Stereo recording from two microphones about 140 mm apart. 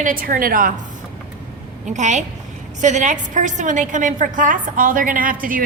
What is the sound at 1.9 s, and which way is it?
A woman's voice, 60° right (ahead or behind).